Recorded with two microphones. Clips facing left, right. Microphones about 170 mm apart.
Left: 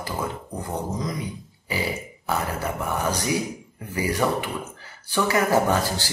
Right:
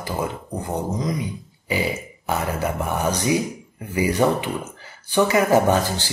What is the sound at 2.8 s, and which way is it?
Speech, 20° right (ahead or behind).